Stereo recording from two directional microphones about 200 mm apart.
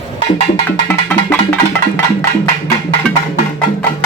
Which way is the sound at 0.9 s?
10° left (ahead or behind).